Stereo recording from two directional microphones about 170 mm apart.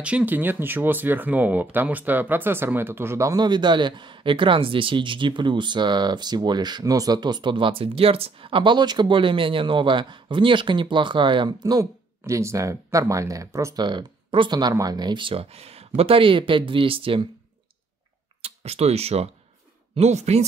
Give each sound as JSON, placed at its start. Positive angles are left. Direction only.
{"t": 0.0, "sound": "speech", "side_deg": -10}
{"t": 18.4, "sound": "speech", "side_deg": -35}